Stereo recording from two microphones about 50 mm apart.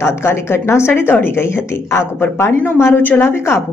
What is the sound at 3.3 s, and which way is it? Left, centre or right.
Speech, left.